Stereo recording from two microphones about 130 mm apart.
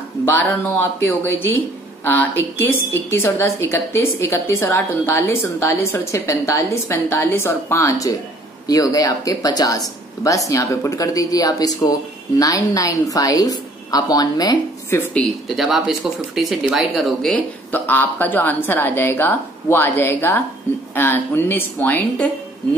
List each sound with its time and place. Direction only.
0.2 s a woman's voice: 15° left (ahead or behind)
15.4 s speech: centre (ahead or behind)
17.6 s a woman's voice: 15° left (ahead or behind)